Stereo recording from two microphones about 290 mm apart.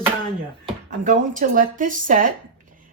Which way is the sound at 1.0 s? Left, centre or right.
Right.